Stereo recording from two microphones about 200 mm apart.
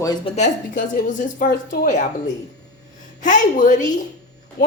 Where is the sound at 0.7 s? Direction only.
40° left (ahead or behind).